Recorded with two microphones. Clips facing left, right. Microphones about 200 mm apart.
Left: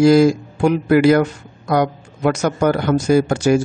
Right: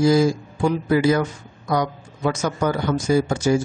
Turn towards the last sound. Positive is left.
turn(degrees=70)  # may be behind; listen again after turning